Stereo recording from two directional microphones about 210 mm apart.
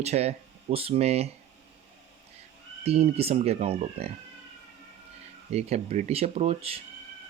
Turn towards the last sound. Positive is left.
turn(degrees=-30)  # may be behind; listen again after turning